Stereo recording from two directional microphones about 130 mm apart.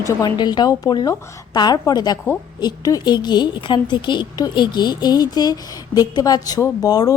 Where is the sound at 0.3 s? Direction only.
35° left (ahead or behind).